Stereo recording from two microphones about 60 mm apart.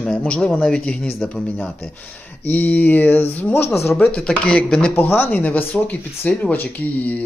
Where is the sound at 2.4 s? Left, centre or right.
Left.